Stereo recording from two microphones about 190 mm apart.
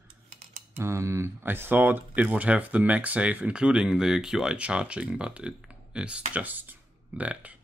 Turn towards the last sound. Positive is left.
turn(degrees=-10)  # may be behind; listen again after turning